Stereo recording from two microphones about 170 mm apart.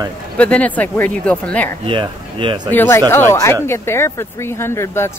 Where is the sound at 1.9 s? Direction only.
30° right (ahead or behind).